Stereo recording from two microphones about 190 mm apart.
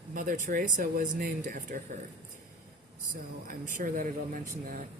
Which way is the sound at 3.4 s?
45° right (ahead or behind).